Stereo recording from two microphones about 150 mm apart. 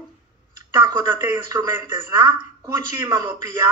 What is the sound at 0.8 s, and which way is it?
Speech, 25° right (ahead or behind).